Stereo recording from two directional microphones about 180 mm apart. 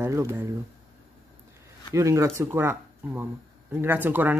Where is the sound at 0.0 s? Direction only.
15° right (ahead or behind).